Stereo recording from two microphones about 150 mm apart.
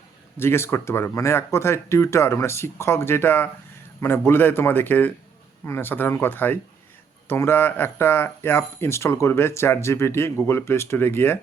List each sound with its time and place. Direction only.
0.3 s speech: 15° left (ahead or behind)